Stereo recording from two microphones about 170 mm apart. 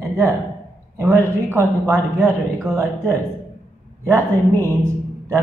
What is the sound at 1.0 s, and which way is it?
A man's voice, 15° right (ahead or behind).